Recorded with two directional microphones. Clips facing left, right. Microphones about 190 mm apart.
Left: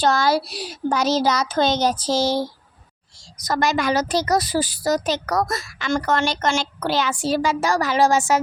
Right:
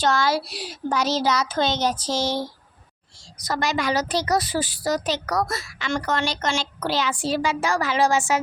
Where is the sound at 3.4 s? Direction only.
45° left (ahead or behind).